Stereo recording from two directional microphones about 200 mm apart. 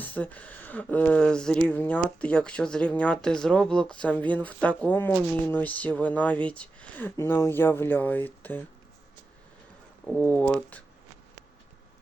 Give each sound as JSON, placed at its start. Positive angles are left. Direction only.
{"t": 0.0, "sound": "speech", "side_deg": 10}
{"t": 10.2, "sound": "speech", "side_deg": 10}